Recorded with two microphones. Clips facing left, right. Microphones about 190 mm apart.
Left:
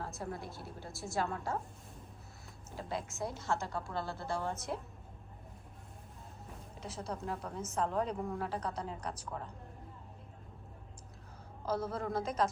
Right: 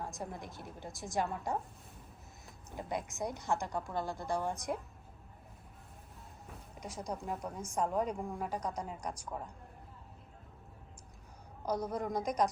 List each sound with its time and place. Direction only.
0.0 s a woman's voice: 15° right (ahead or behind)
2.6 s a woman's voice: 15° right (ahead or behind)
6.7 s a woman's voice: 15° right (ahead or behind)
11.6 s a woman's voice: 15° right (ahead or behind)